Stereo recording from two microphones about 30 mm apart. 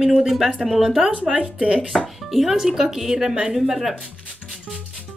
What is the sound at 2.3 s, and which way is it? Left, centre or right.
Speech, centre.